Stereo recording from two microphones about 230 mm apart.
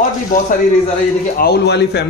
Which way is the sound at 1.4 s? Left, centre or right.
Left.